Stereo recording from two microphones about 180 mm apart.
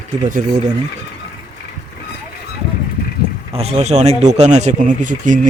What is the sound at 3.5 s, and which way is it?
Speech, 35° right (ahead or behind).